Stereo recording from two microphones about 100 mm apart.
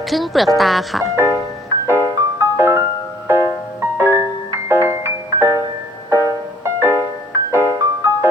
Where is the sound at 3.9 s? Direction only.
25° right (ahead or behind).